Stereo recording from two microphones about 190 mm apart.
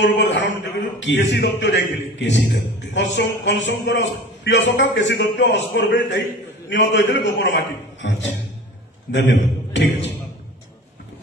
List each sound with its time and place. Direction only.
0.0 s a man's voice: 70° left (ahead or behind)